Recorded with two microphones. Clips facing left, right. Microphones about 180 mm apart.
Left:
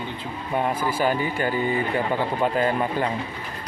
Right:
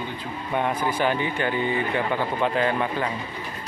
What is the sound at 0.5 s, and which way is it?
Speech, 5° left (ahead or behind).